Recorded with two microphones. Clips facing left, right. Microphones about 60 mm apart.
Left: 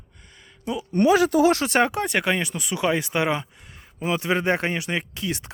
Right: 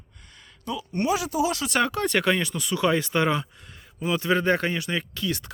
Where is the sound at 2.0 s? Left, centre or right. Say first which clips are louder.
Even; centre.